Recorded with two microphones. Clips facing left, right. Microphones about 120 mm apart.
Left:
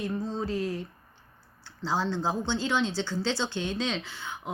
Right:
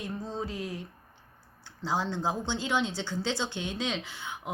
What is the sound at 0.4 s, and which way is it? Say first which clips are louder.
Speech: left 6 dB; 15° right (ahead or behind).